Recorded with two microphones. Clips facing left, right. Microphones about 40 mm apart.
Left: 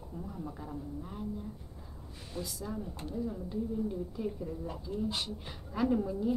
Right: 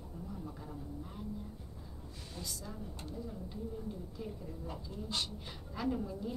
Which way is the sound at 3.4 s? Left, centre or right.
Centre.